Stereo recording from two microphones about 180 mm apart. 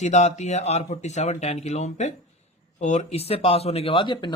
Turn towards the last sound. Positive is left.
turn(degrees=25)  # may be behind; listen again after turning